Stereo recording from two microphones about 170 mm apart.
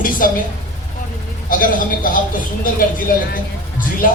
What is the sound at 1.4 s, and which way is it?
Speech, 55° left (ahead or behind).